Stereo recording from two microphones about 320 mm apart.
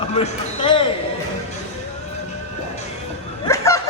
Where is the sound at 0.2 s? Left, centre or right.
Centre.